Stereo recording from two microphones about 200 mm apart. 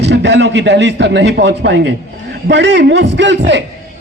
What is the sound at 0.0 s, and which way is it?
A man's voice, 60° right (ahead or behind).